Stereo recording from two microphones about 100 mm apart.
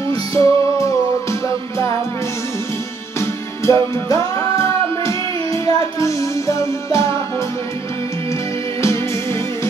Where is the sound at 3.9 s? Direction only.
30° left (ahead or behind).